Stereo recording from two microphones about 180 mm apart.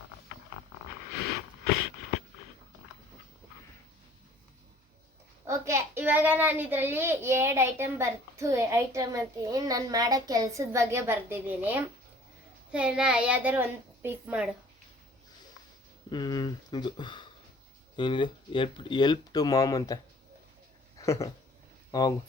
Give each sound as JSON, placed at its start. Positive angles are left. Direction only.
{"t": 5.5, "sound": "a child's voice", "side_deg": -15}
{"t": 16.0, "sound": "a sound", "side_deg": 25}
{"t": 17.9, "sound": "speech", "side_deg": 25}
{"t": 21.0, "sound": "speech", "side_deg": 15}